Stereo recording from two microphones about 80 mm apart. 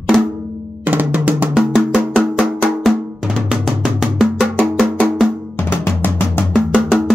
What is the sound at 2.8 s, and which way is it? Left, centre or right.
Drum, centre.